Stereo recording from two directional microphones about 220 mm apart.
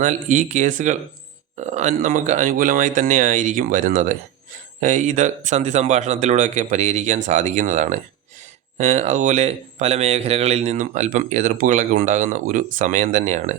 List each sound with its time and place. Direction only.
0.0 s speech: 35° right (ahead or behind)